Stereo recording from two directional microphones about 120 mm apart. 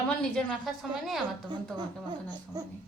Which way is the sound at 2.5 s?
30° right (ahead or behind).